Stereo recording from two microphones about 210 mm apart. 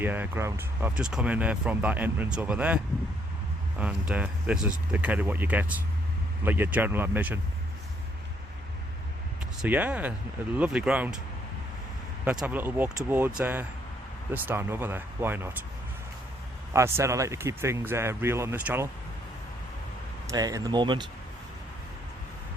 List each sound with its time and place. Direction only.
0.0 s speech: 10° right (ahead or behind)
9.6 s speech: 5° right (ahead or behind)
12.2 s speech: 5° right (ahead or behind)
16.7 s speech: 15° right (ahead or behind)
20.3 s speech: 20° right (ahead or behind)